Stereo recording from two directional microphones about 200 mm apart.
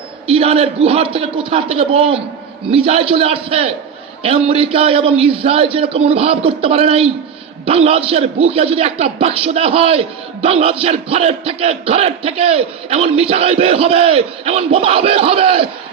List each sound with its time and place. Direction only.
0.3 s a man's voice: 30° right (ahead or behind)